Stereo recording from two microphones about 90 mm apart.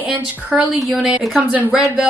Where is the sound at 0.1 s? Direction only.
15° right (ahead or behind).